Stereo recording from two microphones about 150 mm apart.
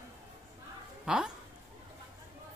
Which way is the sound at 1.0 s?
5° right (ahead or behind).